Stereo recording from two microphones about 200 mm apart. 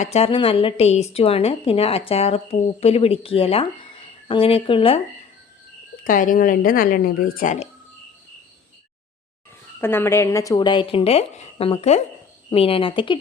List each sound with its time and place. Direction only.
0.0 s a woman's voice: 30° left (ahead or behind)
6.1 s speech: 45° left (ahead or behind)
9.8 s a woman's voice: 10° left (ahead or behind)